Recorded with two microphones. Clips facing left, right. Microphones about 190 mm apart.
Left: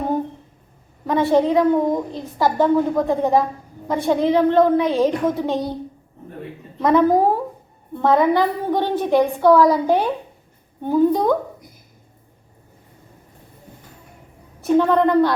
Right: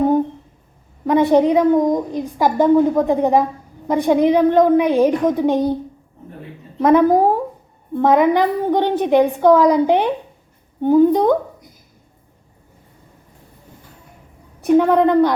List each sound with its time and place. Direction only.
1.0 s a woman's voice: 15° right (ahead or behind)
6.7 s a woman's voice: 15° right (ahead or behind)
14.6 s a woman's voice: 15° right (ahead or behind)